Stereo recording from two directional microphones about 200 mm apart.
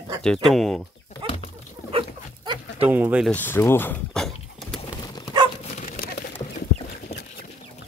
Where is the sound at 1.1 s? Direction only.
35° left (ahead or behind).